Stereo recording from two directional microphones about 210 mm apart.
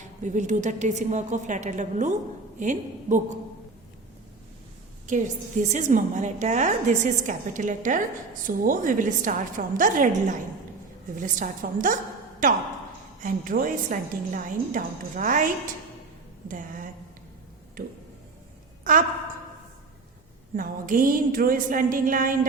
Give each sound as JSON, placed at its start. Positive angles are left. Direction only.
{"t": 0.2, "sound": "a woman's voice", "side_deg": -35}
{"t": 5.0, "sound": "a woman's voice", "side_deg": -35}
{"t": 16.5, "sound": "a woman's voice", "side_deg": -40}
{"t": 20.6, "sound": "a woman's voice", "side_deg": -40}